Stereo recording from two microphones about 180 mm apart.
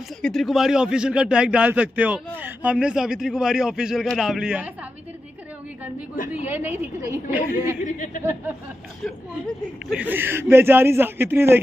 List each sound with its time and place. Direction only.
0.2 s speech: centre (ahead or behind)
6.4 s a man's voice: 10° right (ahead or behind)
7.8 s speech: 45° left (ahead or behind)
9.8 s a man's voice: 10° right (ahead or behind)